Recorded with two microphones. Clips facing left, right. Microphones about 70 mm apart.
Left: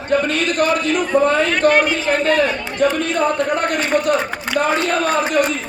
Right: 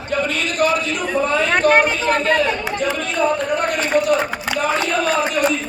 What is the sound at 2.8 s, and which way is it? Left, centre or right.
A man's voice, left.